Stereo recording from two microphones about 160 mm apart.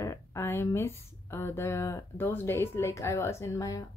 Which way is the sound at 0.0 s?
20° left (ahead or behind).